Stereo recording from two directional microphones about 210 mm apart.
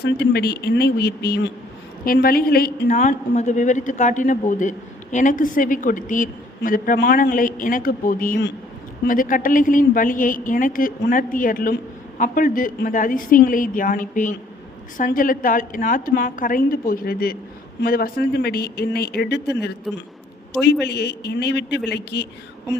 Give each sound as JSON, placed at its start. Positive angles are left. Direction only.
{"t": 0.0, "sound": "a woman's voice", "side_deg": 50}
{"t": 20.8, "sound": "speech", "side_deg": 50}